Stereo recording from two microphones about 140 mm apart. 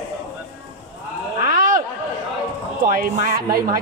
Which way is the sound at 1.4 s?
75° right (ahead or behind).